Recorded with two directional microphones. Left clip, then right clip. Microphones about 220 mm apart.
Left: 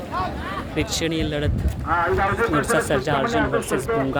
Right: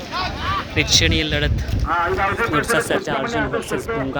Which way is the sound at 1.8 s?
15° right (ahead or behind).